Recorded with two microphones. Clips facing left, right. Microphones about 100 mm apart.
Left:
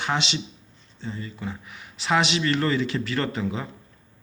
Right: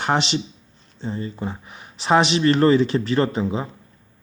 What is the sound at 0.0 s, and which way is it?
Speech, 40° right (ahead or behind).